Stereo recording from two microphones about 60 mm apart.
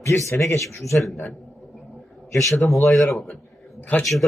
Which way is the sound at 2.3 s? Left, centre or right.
Left.